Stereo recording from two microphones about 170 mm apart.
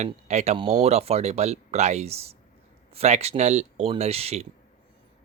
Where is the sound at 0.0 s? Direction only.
40° right (ahead or behind).